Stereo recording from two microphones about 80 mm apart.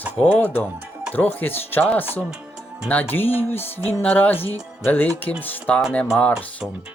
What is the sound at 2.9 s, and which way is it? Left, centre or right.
Speech, left.